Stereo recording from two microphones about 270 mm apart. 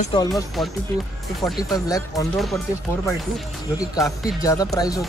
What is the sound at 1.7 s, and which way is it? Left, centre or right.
Speech, centre.